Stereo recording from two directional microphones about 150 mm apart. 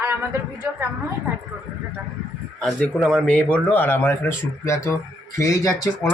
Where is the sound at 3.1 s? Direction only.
5° left (ahead or behind).